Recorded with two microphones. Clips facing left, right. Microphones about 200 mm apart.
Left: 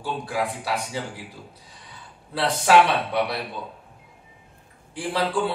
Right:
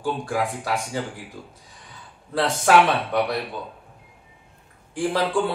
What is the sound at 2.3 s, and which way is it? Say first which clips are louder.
Speech: even; 45° right (ahead or behind).